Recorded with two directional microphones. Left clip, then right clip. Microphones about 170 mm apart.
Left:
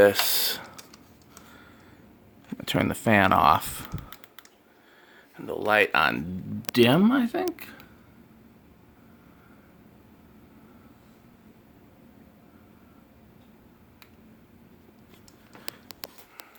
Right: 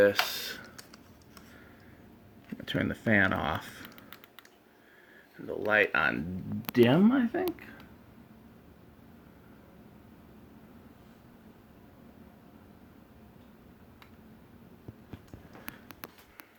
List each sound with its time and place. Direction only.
0.0 s typing: 40° left (ahead or behind)
2.6 s speech: 35° left (ahead or behind)
3.8 s typing: 20° left (ahead or behind)
5.5 s speech: 30° left (ahead or behind)
15.6 s a sound: 30° right (ahead or behind)